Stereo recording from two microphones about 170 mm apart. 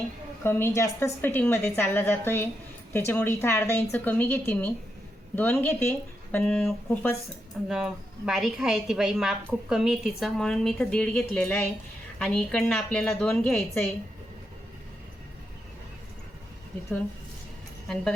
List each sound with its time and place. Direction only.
0.4 s a woman's voice: 15° left (ahead or behind)
7.7 s a woman's voice: 5° right (ahead or behind)